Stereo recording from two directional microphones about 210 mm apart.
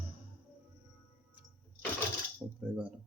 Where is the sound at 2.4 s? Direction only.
20° right (ahead or behind).